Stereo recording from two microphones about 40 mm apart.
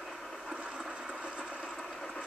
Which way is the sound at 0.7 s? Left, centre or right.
Centre.